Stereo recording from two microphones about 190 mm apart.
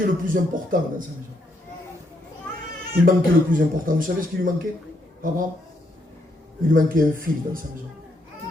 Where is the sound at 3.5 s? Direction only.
45° right (ahead or behind).